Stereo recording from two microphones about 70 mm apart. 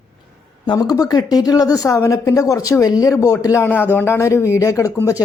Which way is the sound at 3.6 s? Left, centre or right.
Left.